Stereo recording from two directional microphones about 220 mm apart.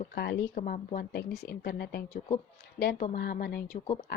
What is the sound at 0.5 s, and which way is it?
Speech, 35° left (ahead or behind).